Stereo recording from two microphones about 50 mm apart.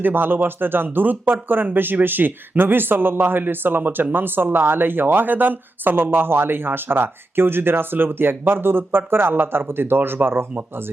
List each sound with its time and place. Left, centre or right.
0.0 s speech: right